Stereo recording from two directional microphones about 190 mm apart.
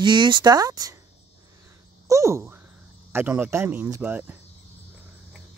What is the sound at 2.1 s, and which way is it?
Speech, 15° right (ahead or behind).